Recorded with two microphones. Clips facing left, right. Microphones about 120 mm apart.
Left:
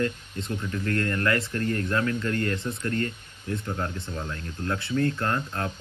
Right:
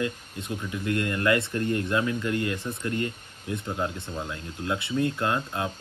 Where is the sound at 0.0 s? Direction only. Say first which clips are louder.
Left 2 dB; 10° right (ahead or behind).